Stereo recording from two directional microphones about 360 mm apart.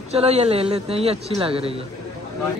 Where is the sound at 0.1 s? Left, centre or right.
Centre.